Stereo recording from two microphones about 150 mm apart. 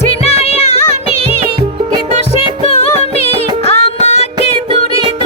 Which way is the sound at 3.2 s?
45° left (ahead or behind).